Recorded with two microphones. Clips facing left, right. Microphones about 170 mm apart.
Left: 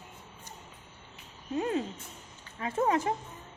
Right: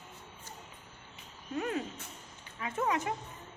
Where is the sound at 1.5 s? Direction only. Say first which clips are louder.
Left 4 dB; 25° left (ahead or behind).